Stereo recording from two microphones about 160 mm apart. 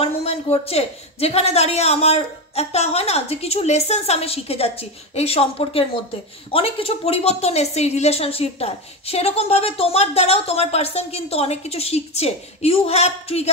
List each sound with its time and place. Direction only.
0.0 s a woman's voice: 40° left (ahead or behind)